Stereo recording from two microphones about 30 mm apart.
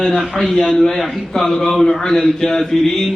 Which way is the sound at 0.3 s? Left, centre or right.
Centre.